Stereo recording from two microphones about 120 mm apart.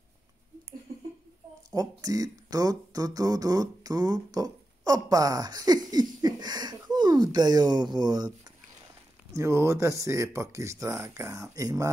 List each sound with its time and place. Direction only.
1.7 s speech: 30° right (ahead or behind)
9.3 s speech: 25° right (ahead or behind)